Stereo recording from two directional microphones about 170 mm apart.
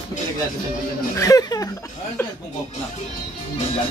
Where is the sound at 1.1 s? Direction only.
20° left (ahead or behind).